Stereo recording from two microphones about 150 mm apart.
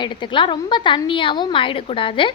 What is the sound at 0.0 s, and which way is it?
A woman's voice, 30° left (ahead or behind).